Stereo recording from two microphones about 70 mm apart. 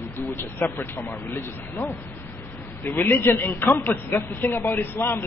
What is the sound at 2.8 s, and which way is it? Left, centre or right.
A man's voice, left.